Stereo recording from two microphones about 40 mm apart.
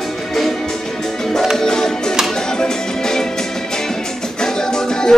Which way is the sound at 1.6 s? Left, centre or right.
Centre.